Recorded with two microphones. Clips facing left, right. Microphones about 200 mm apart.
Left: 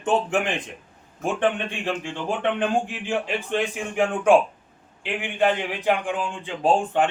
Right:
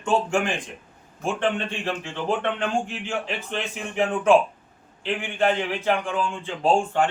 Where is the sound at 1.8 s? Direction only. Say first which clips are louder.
Even; 15° left (ahead or behind).